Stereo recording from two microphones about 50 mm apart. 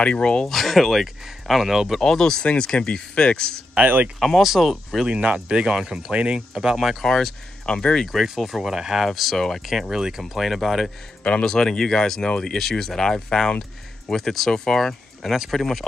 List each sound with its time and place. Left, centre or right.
0.0 s speech: left
0.5 s speech: centre
2.0 s speech: centre
3.8 s speech: right
4.2 s speech: centre
5.0 s speech: right
7.0 s speech: centre
7.7 s speech: centre
8.1 s speech: centre
11.4 s speech: centre